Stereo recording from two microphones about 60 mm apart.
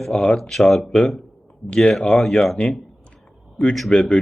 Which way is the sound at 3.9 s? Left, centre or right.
Centre.